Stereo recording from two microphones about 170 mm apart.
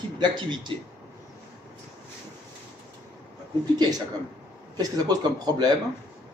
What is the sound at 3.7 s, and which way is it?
Speech, 20° right (ahead or behind).